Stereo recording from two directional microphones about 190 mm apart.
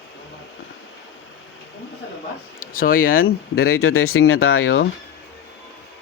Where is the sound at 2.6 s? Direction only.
50° left (ahead or behind).